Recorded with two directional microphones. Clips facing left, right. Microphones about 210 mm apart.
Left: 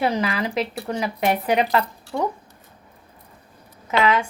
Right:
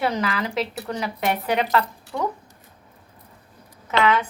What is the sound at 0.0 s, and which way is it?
Speech, 10° left (ahead or behind).